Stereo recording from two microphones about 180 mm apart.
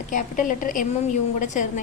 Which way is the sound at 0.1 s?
45° left (ahead or behind).